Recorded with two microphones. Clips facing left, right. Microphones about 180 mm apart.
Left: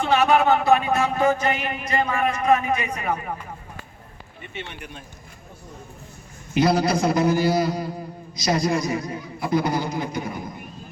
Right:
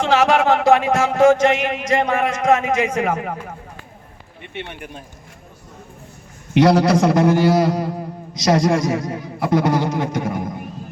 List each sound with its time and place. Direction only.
0.0 s speech: 90° right
4.5 s speech: 55° right (ahead or behind)
6.5 s a man's voice: 80° right